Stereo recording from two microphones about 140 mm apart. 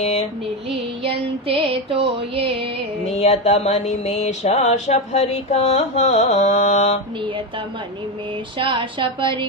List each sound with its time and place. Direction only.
1.0 s music: 40° right (ahead or behind)
3.1 s a sound: 55° left (ahead or behind)
8.5 s music: 35° right (ahead or behind)